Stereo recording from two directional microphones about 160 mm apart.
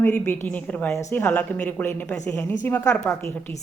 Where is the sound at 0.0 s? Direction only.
15° left (ahead or behind).